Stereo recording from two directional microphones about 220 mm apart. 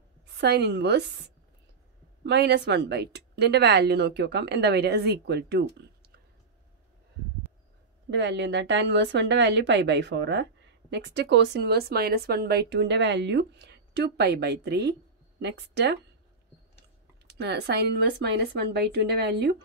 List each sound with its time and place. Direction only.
0.4 s speech: 50° right (ahead or behind)
2.2 s speech: 50° right (ahead or behind)
8.1 s speech: 55° right (ahead or behind)
17.3 s speech: 50° right (ahead or behind)